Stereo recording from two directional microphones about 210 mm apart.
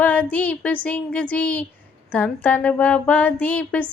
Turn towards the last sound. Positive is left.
turn(degrees=5)  # may be behind; listen again after turning